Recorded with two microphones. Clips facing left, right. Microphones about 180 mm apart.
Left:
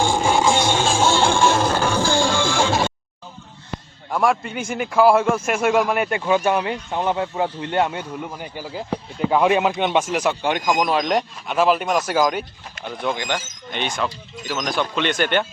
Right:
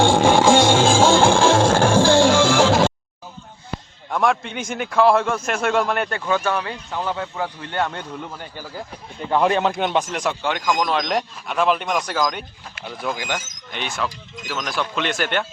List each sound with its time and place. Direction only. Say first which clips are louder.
0.0 s a sound: right 4 dB; 90° right
1.3 s music: right 3 dB; 90° right
4.1 s a man's voice: left 1 dB; 5° left (ahead or behind); by 7.9 s 20° left (ahead or behind)
7.9 s a man's voice: left 2 dB; 10° left (ahead or behind)
10.4 s speech: left 2 dB; 15° left (ahead or behind)
12.8 s speech: left 2 dB; 5° right (ahead or behind)